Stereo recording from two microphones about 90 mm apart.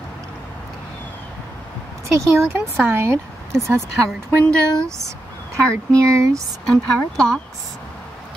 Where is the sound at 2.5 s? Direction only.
25° right (ahead or behind).